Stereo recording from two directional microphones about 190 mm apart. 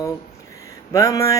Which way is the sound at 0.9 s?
15° left (ahead or behind).